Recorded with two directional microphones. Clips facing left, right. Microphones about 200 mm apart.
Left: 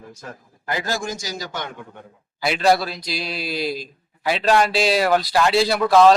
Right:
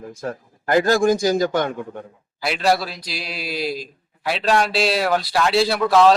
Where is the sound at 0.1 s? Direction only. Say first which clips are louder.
Right 9 dB; 50° right (ahead or behind).